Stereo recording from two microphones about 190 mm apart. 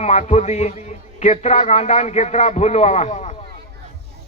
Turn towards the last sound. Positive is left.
turn(degrees=40)  # may be behind; listen again after turning